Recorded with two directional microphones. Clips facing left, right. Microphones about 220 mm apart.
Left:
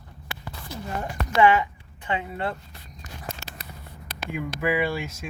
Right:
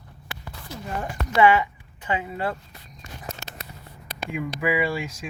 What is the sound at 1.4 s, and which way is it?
Speech, 10° right (ahead or behind).